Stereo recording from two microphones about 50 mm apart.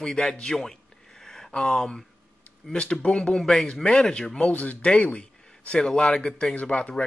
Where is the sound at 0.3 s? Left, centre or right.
Centre.